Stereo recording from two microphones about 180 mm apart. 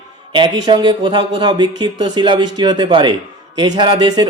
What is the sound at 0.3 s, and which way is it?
Speech, 25° right (ahead or behind).